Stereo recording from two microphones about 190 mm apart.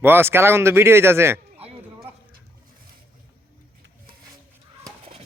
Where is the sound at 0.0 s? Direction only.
10° right (ahead or behind).